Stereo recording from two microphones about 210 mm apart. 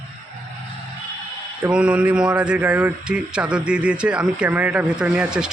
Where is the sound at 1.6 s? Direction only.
5° right (ahead or behind).